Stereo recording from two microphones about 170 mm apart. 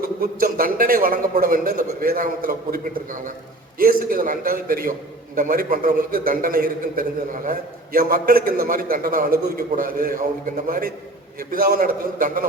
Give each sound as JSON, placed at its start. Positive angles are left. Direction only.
{"t": 0.2, "sound": "a man's voice", "side_deg": -55}